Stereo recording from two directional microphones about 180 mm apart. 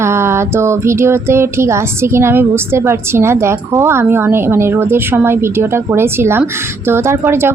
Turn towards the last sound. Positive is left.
turn(degrees=-15)  # may be behind; listen again after turning